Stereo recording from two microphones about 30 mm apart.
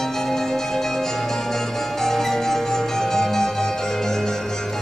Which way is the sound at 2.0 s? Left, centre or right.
Centre.